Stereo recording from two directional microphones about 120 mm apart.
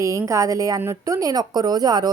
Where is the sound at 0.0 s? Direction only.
25° right (ahead or behind).